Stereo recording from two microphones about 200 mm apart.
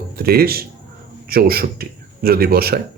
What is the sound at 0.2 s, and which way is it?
A man's voice, 50° right (ahead or behind).